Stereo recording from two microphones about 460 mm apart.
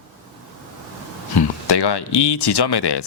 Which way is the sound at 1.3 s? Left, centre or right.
Left.